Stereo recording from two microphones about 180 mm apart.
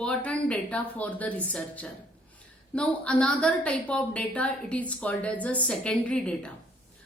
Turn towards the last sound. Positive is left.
turn(degrees=5)  # may be behind; listen again after turning